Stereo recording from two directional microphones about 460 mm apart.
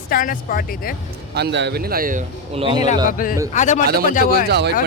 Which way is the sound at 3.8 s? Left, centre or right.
Centre.